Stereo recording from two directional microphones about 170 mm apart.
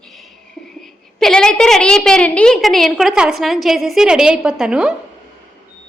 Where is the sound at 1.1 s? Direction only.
5° left (ahead or behind).